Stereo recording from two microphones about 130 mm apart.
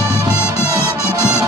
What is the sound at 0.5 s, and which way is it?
Music, 20° left (ahead or behind).